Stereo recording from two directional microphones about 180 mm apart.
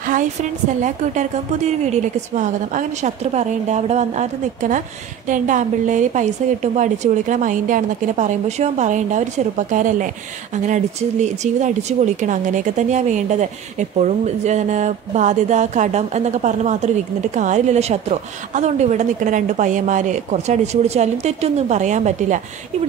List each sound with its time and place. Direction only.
0.0 s a woman's voice: 45° right (ahead or behind)